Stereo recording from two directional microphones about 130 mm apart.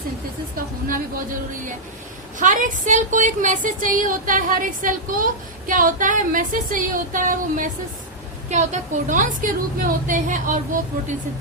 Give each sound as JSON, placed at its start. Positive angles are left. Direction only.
{"t": 0.5, "sound": "speech", "side_deg": -90}
{"t": 2.4, "sound": "speech", "side_deg": -85}
{"t": 8.4, "sound": "a woman's voice", "side_deg": -65}